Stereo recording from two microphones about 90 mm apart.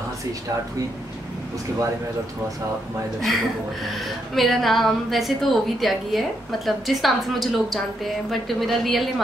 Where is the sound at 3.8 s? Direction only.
Centre (ahead or behind).